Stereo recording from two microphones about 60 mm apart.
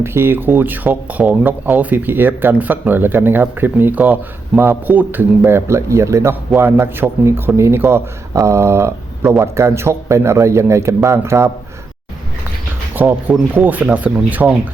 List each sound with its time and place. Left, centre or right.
0.0 s speech: right
5.5 s a man's voice: right
6.6 s a man's voice: right
13.0 s speech: right